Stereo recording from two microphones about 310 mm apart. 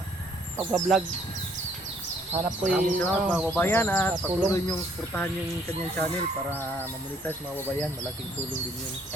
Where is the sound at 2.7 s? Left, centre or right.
Centre.